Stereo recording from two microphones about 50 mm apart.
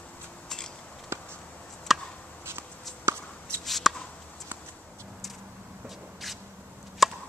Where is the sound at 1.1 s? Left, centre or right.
Right.